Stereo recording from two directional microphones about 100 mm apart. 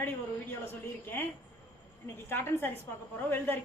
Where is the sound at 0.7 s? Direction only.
20° left (ahead or behind).